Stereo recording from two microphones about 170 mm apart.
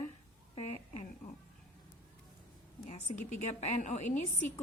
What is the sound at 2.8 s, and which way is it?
A woman's voice, 40° left (ahead or behind).